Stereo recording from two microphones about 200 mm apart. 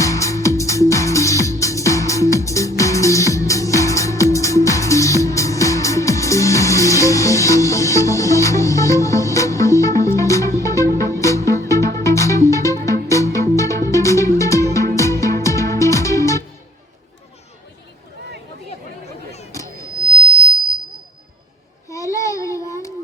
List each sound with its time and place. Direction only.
0.0 s music: 15° left (ahead or behind)
19.5 s a sound: 15° left (ahead or behind)
21.8 s child singing: 15° left (ahead or behind)